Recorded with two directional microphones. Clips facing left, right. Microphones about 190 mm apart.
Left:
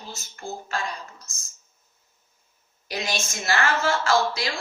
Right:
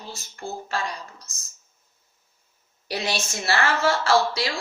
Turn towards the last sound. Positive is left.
turn(degrees=-30)  # may be behind; listen again after turning